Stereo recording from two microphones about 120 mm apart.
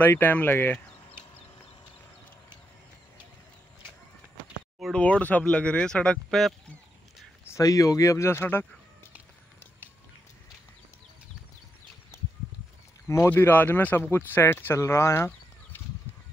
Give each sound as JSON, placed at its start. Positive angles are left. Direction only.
{"t": 0.0, "sound": "speech", "side_deg": 15}
{"t": 4.7, "sound": "a sound", "side_deg": 0}
{"t": 5.0, "sound": "speech", "side_deg": 10}
{"t": 7.4, "sound": "speech", "side_deg": 25}
{"t": 13.1, "sound": "speech", "side_deg": 20}